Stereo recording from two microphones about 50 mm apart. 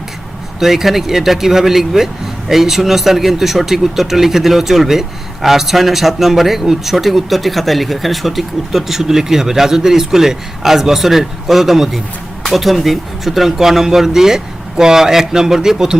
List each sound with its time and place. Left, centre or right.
0.6 s a man's voice: centre